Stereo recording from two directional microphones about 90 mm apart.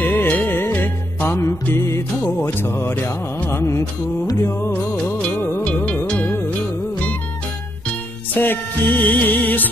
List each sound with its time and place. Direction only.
0.0 s music: 20° left (ahead or behind)
6.0 s music: 15° left (ahead or behind)
8.4 s music: 20° left (ahead or behind)